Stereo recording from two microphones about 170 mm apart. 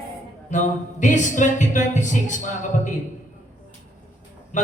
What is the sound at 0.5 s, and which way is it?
Speech, 45° left (ahead or behind).